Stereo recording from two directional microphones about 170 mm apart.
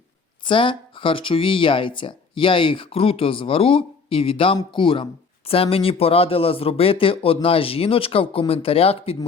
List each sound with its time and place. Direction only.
0.4 s speech: 30° left (ahead or behind)